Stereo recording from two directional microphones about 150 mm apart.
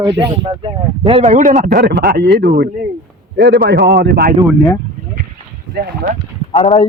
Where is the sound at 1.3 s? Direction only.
55° right (ahead or behind).